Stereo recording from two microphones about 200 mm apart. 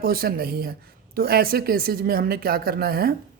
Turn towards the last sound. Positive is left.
turn(degrees=-50)  # may be behind; listen again after turning